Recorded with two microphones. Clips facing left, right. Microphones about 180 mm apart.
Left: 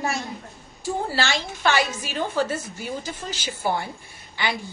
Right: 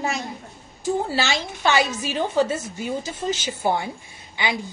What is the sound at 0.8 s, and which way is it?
A woman's voice, 20° right (ahead or behind).